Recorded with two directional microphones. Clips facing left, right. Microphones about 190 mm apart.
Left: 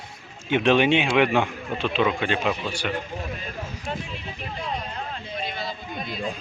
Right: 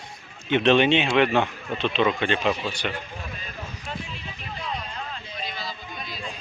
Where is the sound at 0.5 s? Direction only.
10° left (ahead or behind).